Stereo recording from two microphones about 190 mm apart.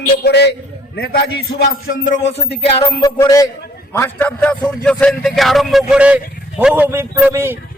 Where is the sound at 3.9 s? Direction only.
10° left (ahead or behind).